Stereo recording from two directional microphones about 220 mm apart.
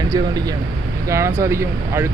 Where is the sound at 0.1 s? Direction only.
15° right (ahead or behind).